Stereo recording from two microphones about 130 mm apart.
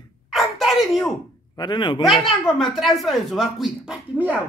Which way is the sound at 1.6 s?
35° left (ahead or behind).